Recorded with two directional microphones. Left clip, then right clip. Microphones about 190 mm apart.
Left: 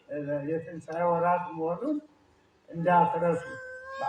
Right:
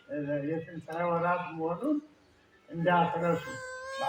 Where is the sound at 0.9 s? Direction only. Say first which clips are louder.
Left 4 dB; 35° right (ahead or behind).